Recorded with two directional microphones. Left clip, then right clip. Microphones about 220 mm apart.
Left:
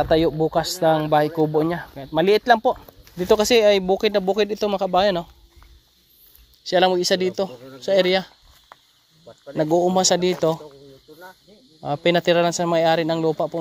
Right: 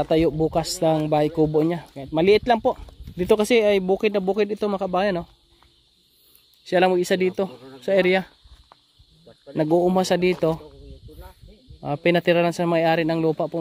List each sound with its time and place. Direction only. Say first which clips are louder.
0.0 s speech: left 2 dB; 25° right (ahead or behind)
6.7 s speech: left 1 dB; 30° right (ahead or behind)
9.6 s speech: left 1 dB; 35° right (ahead or behind)
11.8 s speech: left 1 dB; 25° right (ahead or behind)